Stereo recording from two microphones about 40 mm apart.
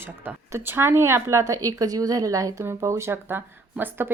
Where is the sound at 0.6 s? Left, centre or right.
Right.